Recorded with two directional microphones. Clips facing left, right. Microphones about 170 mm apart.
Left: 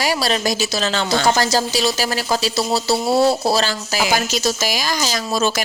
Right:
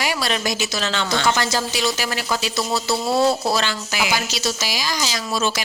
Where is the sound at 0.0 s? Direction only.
35° left (ahead or behind).